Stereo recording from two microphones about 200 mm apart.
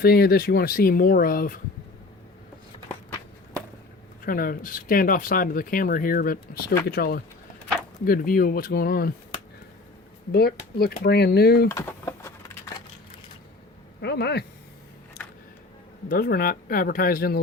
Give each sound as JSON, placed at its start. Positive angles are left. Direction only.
{"t": 0.0, "sound": "speech", "side_deg": 50}
{"t": 4.3, "sound": "speech", "side_deg": 45}
{"t": 10.3, "sound": "speech", "side_deg": 50}
{"t": 11.7, "sound": "a sound", "side_deg": 15}
{"t": 14.0, "sound": "a man's voice", "side_deg": 55}
{"t": 16.0, "sound": "speech", "side_deg": 50}